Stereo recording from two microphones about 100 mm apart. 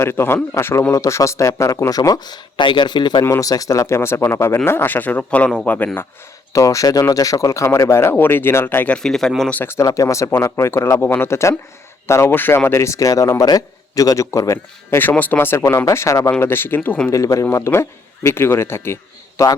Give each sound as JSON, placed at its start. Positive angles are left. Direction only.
{"t": 0.0, "sound": "speech", "side_deg": 25}
{"t": 3.2, "sound": "speech", "side_deg": 35}
{"t": 6.5, "sound": "speech", "side_deg": 30}
{"t": 9.6, "sound": "speech", "side_deg": 30}
{"t": 14.9, "sound": "speech", "side_deg": 20}
{"t": 16.3, "sound": "speech", "side_deg": 20}
{"t": 17.1, "sound": "speech", "side_deg": 30}